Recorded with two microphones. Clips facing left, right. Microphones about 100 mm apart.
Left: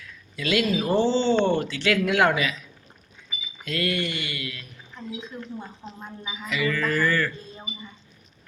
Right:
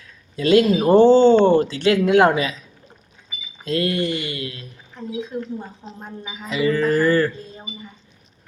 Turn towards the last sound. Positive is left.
turn(degrees=-35)  # may be behind; listen again after turning